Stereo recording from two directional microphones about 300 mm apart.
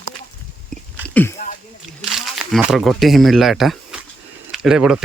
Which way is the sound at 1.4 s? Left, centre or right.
Left.